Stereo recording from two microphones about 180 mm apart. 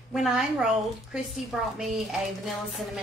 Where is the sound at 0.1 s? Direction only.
5° right (ahead or behind).